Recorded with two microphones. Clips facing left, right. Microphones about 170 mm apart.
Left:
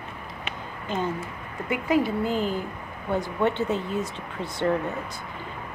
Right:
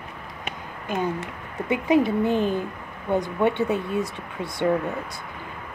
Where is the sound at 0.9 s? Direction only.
10° right (ahead or behind).